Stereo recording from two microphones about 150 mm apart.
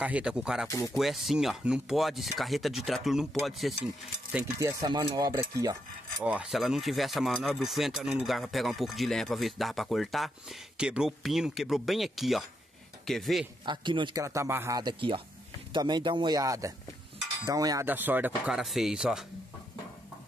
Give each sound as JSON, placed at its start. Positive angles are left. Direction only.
{"t": 0.0, "sound": "speech", "side_deg": -5}
{"t": 0.7, "sound": "speech", "side_deg": 20}
{"t": 0.9, "sound": "speech", "side_deg": 0}
{"t": 4.6, "sound": "speech", "side_deg": -20}
{"t": 6.2, "sound": "speech", "side_deg": -5}
{"t": 13.7, "sound": "speech", "side_deg": -30}
{"t": 14.2, "sound": "speech", "side_deg": -20}
{"t": 14.8, "sound": "speech", "side_deg": -30}
{"t": 17.8, "sound": "speech", "side_deg": -10}